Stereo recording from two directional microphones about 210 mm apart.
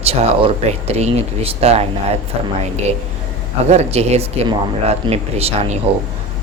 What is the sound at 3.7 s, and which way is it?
Speech, 30° right (ahead or behind).